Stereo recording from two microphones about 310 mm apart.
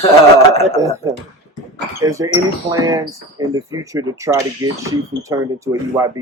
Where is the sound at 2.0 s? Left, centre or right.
Centre.